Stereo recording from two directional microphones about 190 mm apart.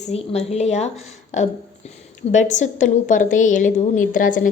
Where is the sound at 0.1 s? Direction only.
35° left (ahead or behind).